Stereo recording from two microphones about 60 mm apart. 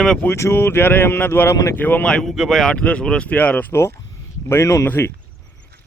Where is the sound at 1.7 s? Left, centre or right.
Left.